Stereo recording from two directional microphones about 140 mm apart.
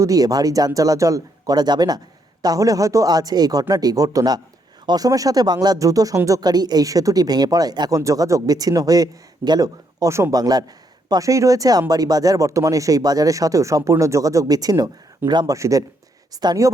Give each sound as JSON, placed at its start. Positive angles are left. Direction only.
{"t": 0.0, "sound": "speech", "side_deg": -25}